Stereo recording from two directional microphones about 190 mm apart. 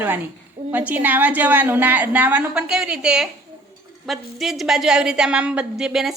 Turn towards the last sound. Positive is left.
turn(degrees=0)  # may be behind; listen again after turning